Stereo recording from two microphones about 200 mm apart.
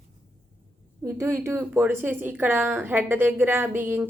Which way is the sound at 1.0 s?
10° right (ahead or behind).